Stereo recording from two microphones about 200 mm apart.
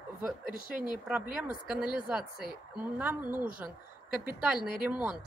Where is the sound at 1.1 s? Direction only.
5° right (ahead or behind).